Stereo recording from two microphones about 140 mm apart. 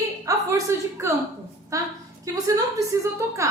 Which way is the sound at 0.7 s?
20° right (ahead or behind).